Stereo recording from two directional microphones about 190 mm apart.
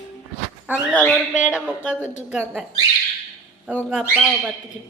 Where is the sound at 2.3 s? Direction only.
5° right (ahead or behind).